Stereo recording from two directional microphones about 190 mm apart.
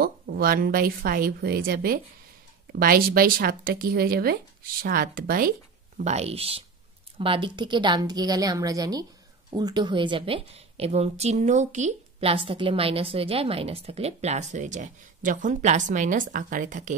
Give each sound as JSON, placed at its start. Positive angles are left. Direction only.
{"t": 0.0, "sound": "speech", "side_deg": -50}
{"t": 5.9, "sound": "a woman's voice", "side_deg": -35}